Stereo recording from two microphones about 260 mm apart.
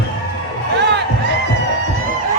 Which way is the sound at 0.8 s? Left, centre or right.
Right.